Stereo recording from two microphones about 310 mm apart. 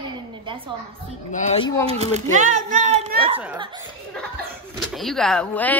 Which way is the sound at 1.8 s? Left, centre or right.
Right.